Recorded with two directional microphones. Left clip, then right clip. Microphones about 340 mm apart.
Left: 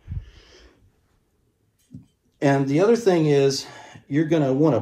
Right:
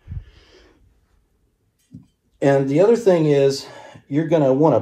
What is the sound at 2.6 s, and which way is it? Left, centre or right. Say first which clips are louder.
Speech: right 5 dB; centre.